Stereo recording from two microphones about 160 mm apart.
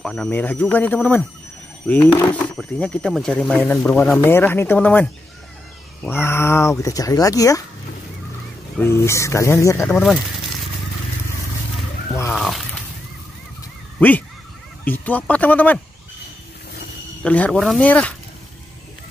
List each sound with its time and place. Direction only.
0.0 s speech: 5° left (ahead or behind); by 7.6 s 20° left (ahead or behind)
8.7 s speech: 15° left (ahead or behind)
9.8 s speech: 10° left (ahead or behind)
12.3 s a sound: centre (ahead or behind)
13.9 s speech: 10° left (ahead or behind)
17.2 s speech: 5° left (ahead or behind)